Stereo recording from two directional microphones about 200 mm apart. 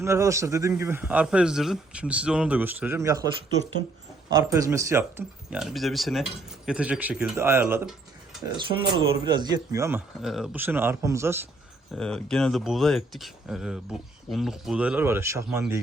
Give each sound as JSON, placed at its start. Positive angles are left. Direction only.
{"t": 0.0, "sound": "speech", "side_deg": -15}
{"t": 4.4, "sound": "speech", "side_deg": -15}
{"t": 8.5, "sound": "speech", "side_deg": -25}
{"t": 10.2, "sound": "speech", "side_deg": 0}
{"t": 11.9, "sound": "speech", "side_deg": 5}